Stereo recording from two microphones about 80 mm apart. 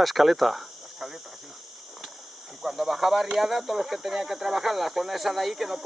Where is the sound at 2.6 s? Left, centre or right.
Centre.